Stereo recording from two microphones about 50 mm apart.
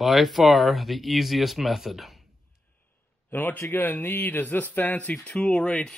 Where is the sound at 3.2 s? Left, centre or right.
Left.